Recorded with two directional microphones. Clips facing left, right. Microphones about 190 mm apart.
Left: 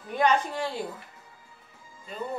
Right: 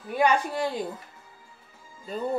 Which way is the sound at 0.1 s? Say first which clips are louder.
Right 1 dB; 10° right (ahead or behind).